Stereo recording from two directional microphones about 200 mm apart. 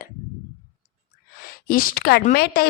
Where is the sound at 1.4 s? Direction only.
45° left (ahead or behind).